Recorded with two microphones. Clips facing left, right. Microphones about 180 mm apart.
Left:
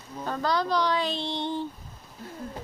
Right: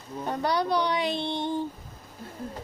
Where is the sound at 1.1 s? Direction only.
55° right (ahead or behind).